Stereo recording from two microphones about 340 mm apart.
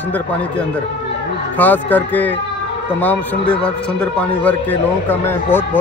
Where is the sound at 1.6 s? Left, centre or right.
Centre.